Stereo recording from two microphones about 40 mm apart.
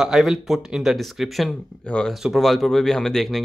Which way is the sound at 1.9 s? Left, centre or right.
Left.